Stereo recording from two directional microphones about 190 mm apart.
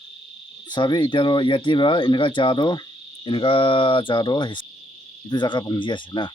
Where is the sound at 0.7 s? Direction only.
25° left (ahead or behind).